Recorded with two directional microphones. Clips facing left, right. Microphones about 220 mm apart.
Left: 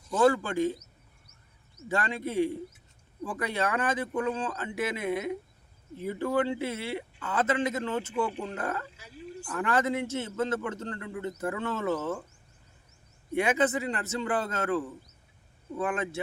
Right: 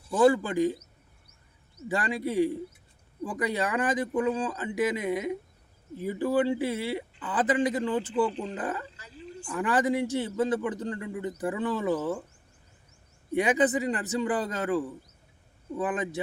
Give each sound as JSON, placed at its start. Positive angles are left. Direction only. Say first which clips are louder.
{"t": 0.1, "sound": "a man's voice", "louder": "right 2 dB", "side_deg": -15}
{"t": 1.9, "sound": "a man's voice", "louder": "right 2 dB", "side_deg": -15}
{"t": 9.0, "sound": "a sound", "louder": "even", "side_deg": 10}
{"t": 9.5, "sound": "a man's voice", "louder": "right 2 dB", "side_deg": -15}
{"t": 13.3, "sound": "a man's voice", "louder": "right 2 dB", "side_deg": -15}